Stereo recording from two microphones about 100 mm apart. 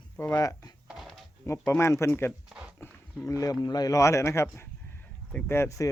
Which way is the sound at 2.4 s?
10° right (ahead or behind).